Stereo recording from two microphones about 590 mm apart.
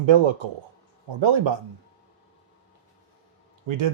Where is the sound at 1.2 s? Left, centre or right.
Right.